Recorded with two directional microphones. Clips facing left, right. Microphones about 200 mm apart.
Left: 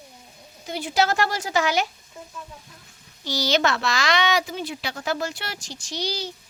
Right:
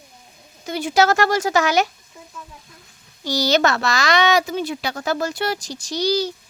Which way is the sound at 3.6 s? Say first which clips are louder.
Right 4 dB; 40° right (ahead or behind).